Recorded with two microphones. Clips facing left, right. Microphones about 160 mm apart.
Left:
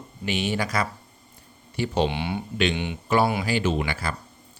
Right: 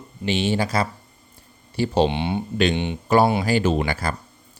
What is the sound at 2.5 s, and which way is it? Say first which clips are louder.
Speech: right 3 dB; 40° right (ahead or behind).